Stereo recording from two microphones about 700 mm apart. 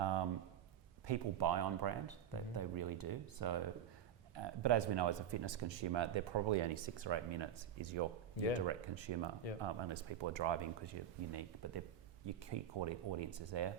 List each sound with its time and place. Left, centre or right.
1.0 s speech: right